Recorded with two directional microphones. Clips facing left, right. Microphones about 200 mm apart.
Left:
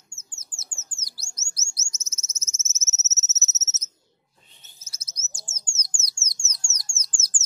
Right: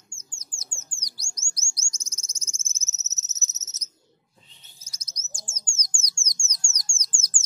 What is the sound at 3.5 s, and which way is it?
Cricket, 5° left (ahead or behind).